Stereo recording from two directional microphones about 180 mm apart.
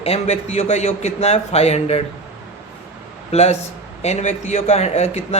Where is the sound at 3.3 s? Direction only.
35° left (ahead or behind).